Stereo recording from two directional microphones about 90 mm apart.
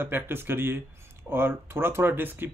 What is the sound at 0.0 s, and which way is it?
Speech, 25° right (ahead or behind).